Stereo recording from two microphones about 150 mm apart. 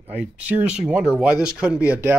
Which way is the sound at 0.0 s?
10° right (ahead or behind).